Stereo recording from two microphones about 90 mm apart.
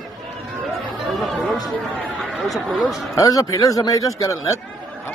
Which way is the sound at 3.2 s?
40° left (ahead or behind).